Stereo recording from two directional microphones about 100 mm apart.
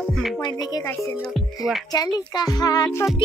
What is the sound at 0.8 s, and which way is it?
Speech, 25° left (ahead or behind).